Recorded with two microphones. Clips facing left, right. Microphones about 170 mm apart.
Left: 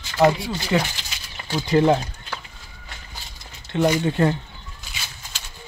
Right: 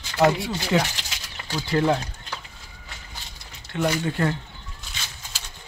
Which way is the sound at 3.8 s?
20° left (ahead or behind).